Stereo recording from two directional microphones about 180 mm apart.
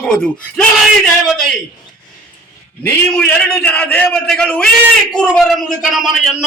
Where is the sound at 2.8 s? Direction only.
5° left (ahead or behind).